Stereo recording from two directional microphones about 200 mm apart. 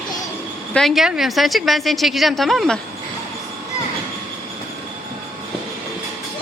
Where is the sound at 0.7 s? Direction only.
Centre (ahead or behind).